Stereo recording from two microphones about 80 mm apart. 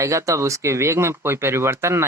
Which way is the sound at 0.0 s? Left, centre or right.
Right.